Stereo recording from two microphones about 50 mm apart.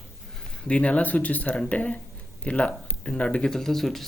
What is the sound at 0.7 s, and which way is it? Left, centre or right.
Speech, left.